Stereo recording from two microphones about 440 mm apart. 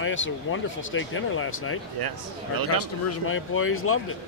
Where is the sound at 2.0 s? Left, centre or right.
Right.